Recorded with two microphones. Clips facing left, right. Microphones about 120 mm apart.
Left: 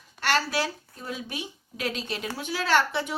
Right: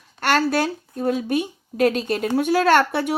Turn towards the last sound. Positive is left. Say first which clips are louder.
# right 7 dB
turn(degrees=-55)  # may be behind; listen again after turning